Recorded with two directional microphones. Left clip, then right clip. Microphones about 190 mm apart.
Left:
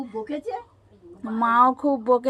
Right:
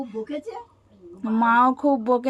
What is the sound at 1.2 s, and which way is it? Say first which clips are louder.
Speech: even; 30° right (ahead or behind).